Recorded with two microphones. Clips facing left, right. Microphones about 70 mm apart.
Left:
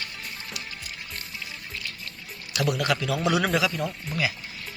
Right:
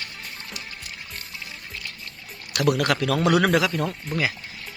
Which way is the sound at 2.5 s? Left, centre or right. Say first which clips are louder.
Right 4 dB; right.